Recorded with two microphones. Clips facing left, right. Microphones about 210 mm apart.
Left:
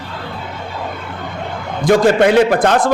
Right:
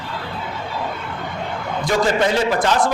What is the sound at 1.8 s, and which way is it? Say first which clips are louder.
A man's voice: left 8 dB; 55° left (ahead or behind).